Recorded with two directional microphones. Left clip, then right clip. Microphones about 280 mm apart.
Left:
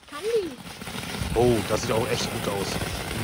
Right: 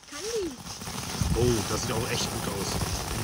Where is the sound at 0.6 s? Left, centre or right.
Centre.